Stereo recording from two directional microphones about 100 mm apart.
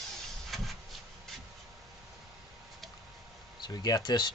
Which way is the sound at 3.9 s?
45° left (ahead or behind).